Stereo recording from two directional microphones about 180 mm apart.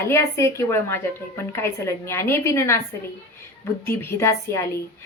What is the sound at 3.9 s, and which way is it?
Speech, 15° left (ahead or behind).